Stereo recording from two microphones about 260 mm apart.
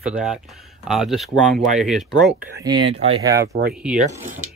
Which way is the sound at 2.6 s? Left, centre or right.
Centre.